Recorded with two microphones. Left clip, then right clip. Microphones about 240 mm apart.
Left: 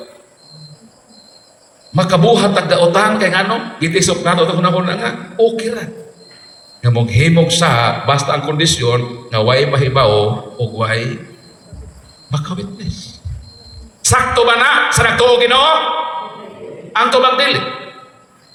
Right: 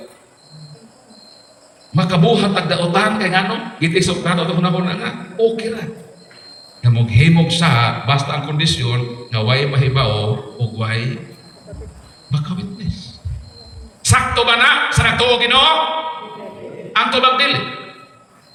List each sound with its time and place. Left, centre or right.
1.9 s a man's voice: centre
12.3 s a man's voice: centre
16.9 s a man's voice: centre